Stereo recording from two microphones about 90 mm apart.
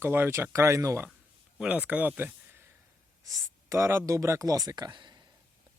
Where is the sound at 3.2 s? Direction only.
35° right (ahead or behind); by 5.2 s 55° right (ahead or behind).